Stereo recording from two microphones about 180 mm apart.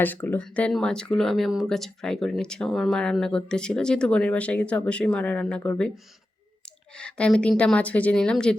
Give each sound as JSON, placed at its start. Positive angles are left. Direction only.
{"t": 0.0, "sound": "speech", "side_deg": 10}
{"t": 6.9, "sound": "speech", "side_deg": 5}